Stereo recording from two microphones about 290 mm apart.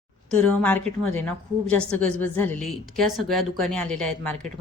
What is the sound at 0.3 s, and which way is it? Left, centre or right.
A woman's voice, centre.